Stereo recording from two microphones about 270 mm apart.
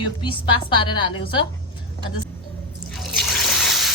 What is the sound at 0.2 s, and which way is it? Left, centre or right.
A woman's voice, centre.